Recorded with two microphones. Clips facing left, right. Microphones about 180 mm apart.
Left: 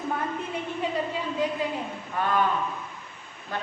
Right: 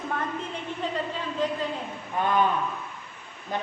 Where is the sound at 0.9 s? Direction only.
10° left (ahead or behind).